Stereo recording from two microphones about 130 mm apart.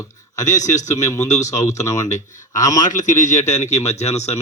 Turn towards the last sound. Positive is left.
turn(degrees=60)  # may be behind; listen again after turning